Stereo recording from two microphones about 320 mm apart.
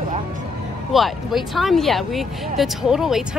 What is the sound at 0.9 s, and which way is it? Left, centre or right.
Speech, centre.